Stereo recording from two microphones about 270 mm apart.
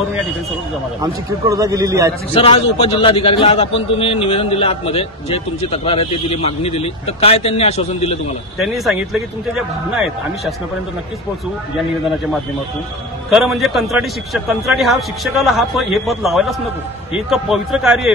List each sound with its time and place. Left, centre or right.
1.0 s a man's voice: centre
2.3 s a man's voice: left
8.5 s a man's voice: centre
13.3 s a man's voice: centre